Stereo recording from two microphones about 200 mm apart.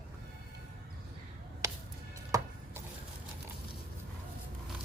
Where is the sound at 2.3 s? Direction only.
15° right (ahead or behind).